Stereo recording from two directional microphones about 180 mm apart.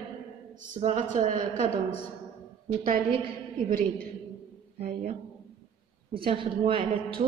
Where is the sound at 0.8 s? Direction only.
35° right (ahead or behind).